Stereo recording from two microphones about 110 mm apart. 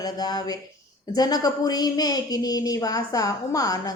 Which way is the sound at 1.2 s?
35° left (ahead or behind).